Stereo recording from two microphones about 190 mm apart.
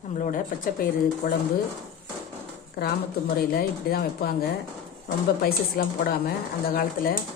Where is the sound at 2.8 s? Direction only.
55° left (ahead or behind).